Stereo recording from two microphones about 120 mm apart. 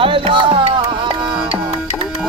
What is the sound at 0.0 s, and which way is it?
Music, 45° right (ahead or behind).